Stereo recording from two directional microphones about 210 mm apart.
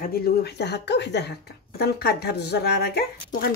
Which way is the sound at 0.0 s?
50° left (ahead or behind).